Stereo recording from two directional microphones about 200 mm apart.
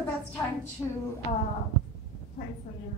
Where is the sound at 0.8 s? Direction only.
10° left (ahead or behind).